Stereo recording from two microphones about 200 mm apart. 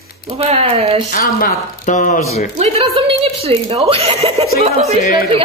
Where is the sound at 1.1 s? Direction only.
40° left (ahead or behind).